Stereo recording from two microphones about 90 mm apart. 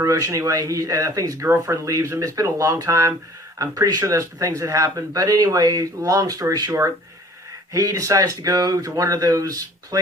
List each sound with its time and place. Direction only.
0.0 s speech: 35° right (ahead or behind)